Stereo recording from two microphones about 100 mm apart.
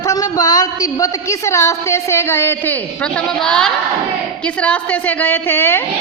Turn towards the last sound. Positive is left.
turn(degrees=20)  # may be behind; listen again after turning